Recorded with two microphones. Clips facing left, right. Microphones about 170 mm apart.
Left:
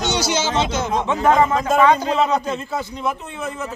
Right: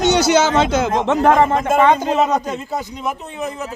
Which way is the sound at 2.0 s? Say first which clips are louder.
Right 2 dB; 45° right (ahead or behind).